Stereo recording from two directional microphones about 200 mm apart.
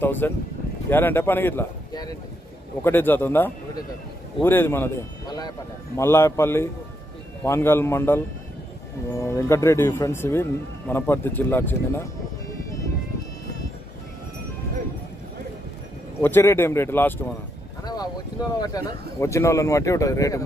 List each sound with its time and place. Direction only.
0.0 s speech: 10° left (ahead or behind)
16.2 s speech: 10° left (ahead or behind)